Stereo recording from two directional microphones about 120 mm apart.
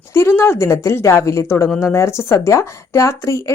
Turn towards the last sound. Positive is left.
turn(degrees=25)  # may be behind; listen again after turning